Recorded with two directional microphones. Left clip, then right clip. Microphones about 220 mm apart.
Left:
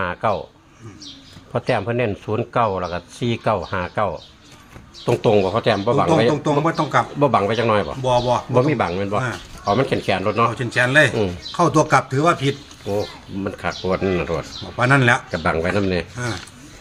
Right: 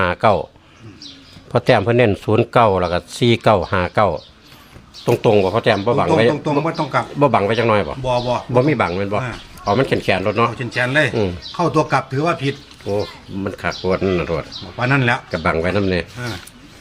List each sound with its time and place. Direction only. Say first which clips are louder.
0.0 s speech: right 6 dB; 50° right (ahead or behind)
1.5 s speech: right 7 dB; 50° right (ahead or behind)
5.0 s speech: right 2 dB; 30° right (ahead or behind)
6.3 s speech: even; 5° left (ahead or behind)
7.2 s speech: right 5 dB; 30° right (ahead or behind)
8.0 s speech: left 1 dB; 5° left (ahead or behind)
8.5 s speech: right 6 dB; 25° right (ahead or behind)
10.5 s speech: left 2 dB; 5° left (ahead or behind)
13.4 s speech: right 3 dB; 30° right (ahead or behind)
14.8 s speech: left 2 dB; 10° left (ahead or behind)
15.3 s speech: right 2 dB; 25° right (ahead or behind)
16.1 s speech: left 1 dB; 10° left (ahead or behind)